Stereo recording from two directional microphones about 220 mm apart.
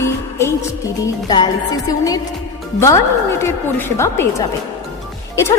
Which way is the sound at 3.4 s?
10° left (ahead or behind).